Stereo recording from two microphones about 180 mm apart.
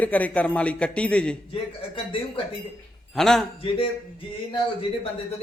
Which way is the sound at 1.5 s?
30° left (ahead or behind).